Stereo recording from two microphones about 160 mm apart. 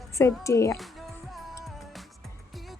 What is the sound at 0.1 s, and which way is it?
Speech, 20° left (ahead or behind).